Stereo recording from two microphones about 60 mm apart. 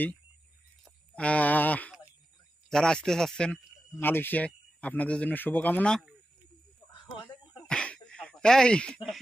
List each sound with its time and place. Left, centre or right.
1.1 s speech: left
2.7 s speech: centre
4.0 s speech: left
7.6 s a sound: centre